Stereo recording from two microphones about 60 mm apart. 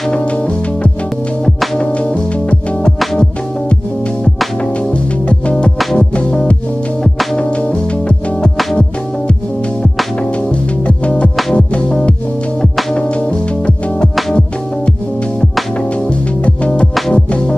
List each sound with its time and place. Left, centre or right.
10.9 s music: centre
16.4 s music: left